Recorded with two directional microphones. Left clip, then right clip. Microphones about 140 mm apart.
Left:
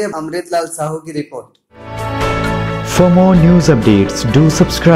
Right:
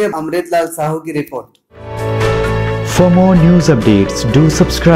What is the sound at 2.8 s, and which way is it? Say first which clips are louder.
Speech: left 1 dB; centre (ahead or behind).